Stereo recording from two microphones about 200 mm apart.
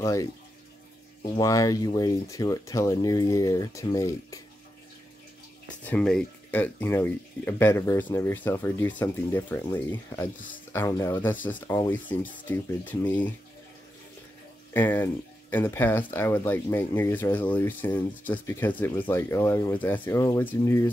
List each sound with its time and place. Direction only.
0.0 s speech: 15° left (ahead or behind)
5.9 s speech: 5° left (ahead or behind)
14.7 s speech: 10° left (ahead or behind)